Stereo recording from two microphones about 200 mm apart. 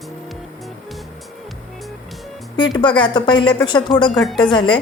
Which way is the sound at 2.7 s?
25° left (ahead or behind).